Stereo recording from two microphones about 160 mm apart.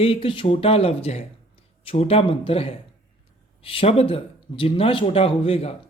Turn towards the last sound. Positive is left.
turn(degrees=35)  # may be behind; listen again after turning